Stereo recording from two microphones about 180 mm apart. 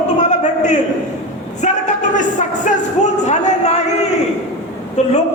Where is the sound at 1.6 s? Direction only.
45° left (ahead or behind).